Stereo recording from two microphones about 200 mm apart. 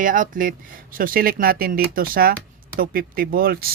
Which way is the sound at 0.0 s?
40° right (ahead or behind).